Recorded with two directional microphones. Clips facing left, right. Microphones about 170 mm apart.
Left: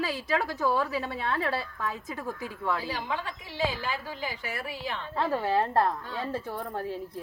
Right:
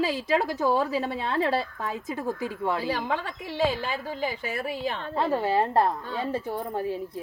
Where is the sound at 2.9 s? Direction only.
55° right (ahead or behind).